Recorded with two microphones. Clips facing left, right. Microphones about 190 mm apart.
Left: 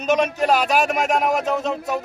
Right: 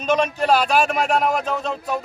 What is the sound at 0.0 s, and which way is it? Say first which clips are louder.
A man's voice: left 1 dB; 15° left (ahead or behind).